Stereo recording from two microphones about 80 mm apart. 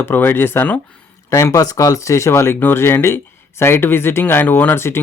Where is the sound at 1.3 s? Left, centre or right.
Left.